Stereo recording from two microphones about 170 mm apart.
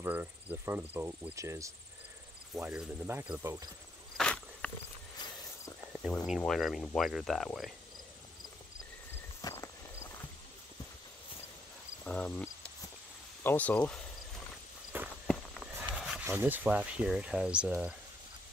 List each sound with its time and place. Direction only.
0.0 s speech: 10° right (ahead or behind)
2.5 s speech: 5° right (ahead or behind)
4.2 s a sound: 5° left (ahead or behind)
5.9 s speech: centre (ahead or behind)
9.4 s walk: 20° left (ahead or behind)
12.0 s cricket: 5° left (ahead or behind)
13.4 s speech: 10° left (ahead or behind)
15.2 s a sound: centre (ahead or behind)
16.3 s speech: 10° right (ahead or behind)